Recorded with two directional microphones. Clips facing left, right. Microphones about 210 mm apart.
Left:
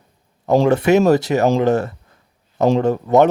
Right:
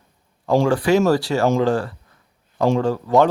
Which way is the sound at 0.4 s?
20° left (ahead or behind).